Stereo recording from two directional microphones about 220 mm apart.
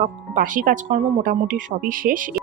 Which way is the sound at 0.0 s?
35° right (ahead or behind).